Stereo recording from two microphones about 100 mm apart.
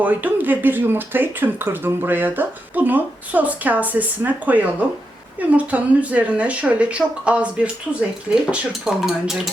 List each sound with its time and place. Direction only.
0.0 s speech: 15° right (ahead or behind)